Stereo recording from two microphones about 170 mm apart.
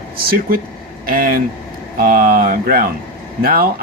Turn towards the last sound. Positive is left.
turn(degrees=-60)  # may be behind; listen again after turning